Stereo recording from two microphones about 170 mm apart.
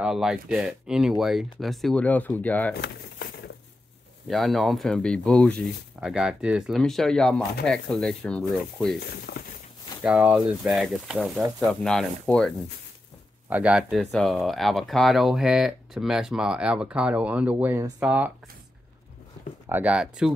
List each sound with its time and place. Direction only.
0.0 s speech: 5° right (ahead or behind)
2.8 s a sound: 65° left (ahead or behind)
4.3 s speech: centre (ahead or behind)
9.1 s a sound: 65° left (ahead or behind)
10.0 s speech: 5° right (ahead or behind)
13.5 s speech: 10° right (ahead or behind)
19.7 s speech: 10° right (ahead or behind)